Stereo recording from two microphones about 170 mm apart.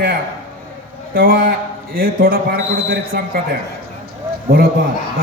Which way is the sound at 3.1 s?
70° right (ahead or behind).